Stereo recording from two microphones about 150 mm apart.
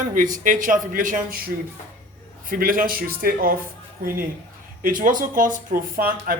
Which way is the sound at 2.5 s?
65° right (ahead or behind).